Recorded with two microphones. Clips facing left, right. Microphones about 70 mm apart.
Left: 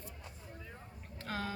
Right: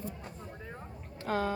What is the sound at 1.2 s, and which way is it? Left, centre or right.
Speech, centre.